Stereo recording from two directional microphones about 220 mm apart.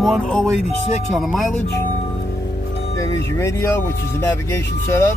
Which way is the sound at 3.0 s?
15° left (ahead or behind).